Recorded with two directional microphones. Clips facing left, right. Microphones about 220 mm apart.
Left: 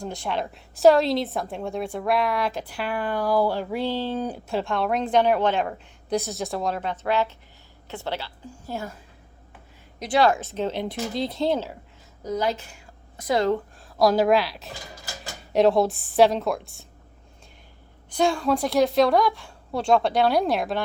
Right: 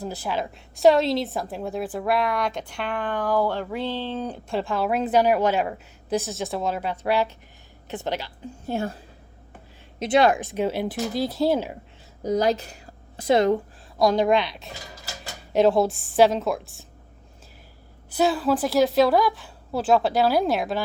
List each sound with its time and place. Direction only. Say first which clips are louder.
0.0 s a woman's voice: even; 5° right (ahead or behind); by 4.5 s 10° left (ahead or behind)
4.5 s a woman's voice: right 1 dB; centre (ahead or behind); by 9.0 s 25° right (ahead or behind)
10.0 s a woman's voice: right 2 dB; 20° right (ahead or behind)
12.2 s a woman's voice: right 4 dB; 40° right (ahead or behind); by 13.6 s 20° right (ahead or behind)
14.0 s a woman's voice: left 1 dB; 5° left (ahead or behind)
18.1 s a woman's voice: right 1 dB; 5° right (ahead or behind)